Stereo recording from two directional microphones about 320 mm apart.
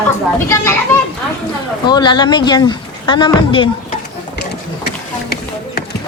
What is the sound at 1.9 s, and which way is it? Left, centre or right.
Speech, centre.